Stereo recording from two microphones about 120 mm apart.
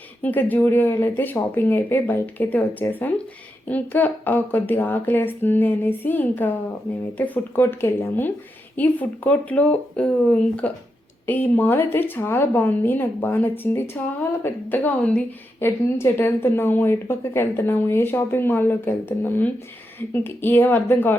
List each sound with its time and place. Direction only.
0.2 s speech: 15° left (ahead or behind)